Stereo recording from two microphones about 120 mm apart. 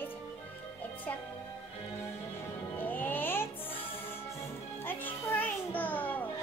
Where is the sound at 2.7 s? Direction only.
15° left (ahead or behind).